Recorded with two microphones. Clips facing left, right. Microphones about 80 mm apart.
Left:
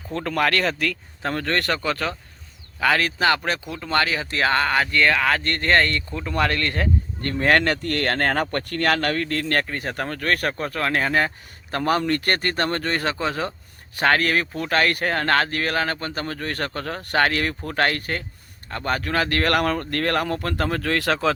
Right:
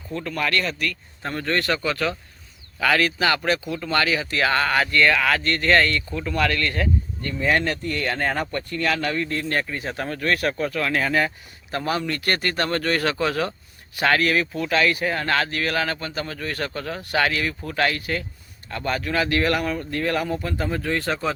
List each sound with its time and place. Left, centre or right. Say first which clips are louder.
0.1 s speech: left 3 dB; left
1.2 s speech: left 1 dB; left
7.2 s speech: left 3 dB; left
13.9 s speech: even; left